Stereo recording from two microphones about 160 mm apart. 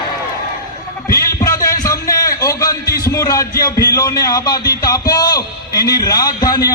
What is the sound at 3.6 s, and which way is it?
A man's voice, 20° left (ahead or behind).